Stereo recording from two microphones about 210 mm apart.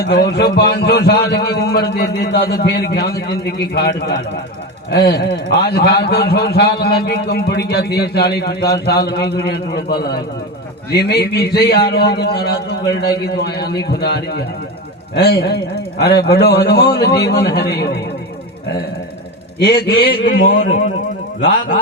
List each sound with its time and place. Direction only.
0.0 s a man's voice: 50° left (ahead or behind)
19.5 s a man's voice: 50° left (ahead or behind)